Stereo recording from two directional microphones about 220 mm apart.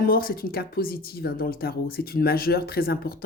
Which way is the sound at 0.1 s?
40° left (ahead or behind).